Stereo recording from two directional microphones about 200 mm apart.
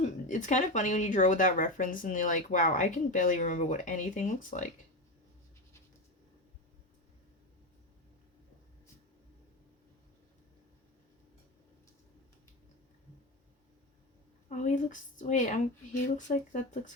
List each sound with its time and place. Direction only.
0.0 s speech: 40° left (ahead or behind)
14.5 s speech: 40° left (ahead or behind)